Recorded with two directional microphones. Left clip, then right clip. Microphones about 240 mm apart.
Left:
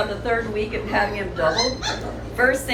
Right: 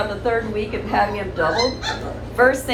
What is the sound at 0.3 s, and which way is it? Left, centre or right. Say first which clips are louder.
A woman's voice: right 3 dB; centre.